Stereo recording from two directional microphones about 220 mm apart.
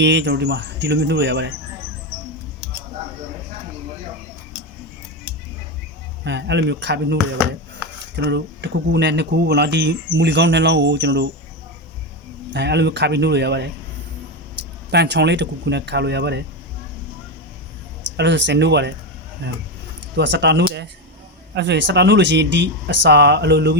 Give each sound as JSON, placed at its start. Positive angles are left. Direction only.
{"t": 0.0, "sound": "speech", "side_deg": -50}
{"t": 6.2, "sound": "speech", "side_deg": -50}
{"t": 12.5, "sound": "speech", "side_deg": -50}
{"t": 14.8, "sound": "speech", "side_deg": -50}
{"t": 18.2, "sound": "speech", "side_deg": -55}